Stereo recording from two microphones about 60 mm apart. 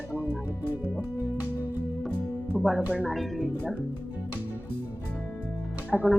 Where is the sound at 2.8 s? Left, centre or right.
Right.